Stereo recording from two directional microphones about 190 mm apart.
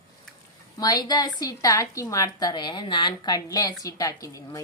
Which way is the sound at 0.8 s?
20° left (ahead or behind).